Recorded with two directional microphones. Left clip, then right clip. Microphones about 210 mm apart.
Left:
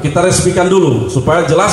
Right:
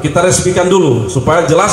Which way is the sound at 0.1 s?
40° right (ahead or behind).